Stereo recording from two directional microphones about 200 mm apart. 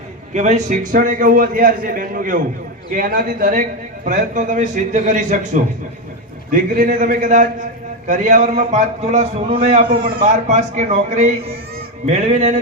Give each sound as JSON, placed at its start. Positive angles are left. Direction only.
{"t": 0.3, "sound": "a man's voice", "side_deg": -35}